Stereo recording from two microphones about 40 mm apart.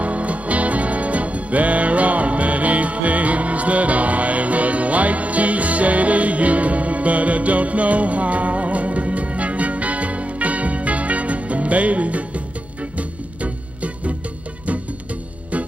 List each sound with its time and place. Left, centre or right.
0.0 s music: right